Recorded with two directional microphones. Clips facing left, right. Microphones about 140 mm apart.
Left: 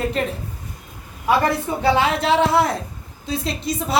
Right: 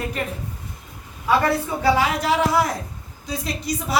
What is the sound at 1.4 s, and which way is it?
A woman's voice, 25° left (ahead or behind).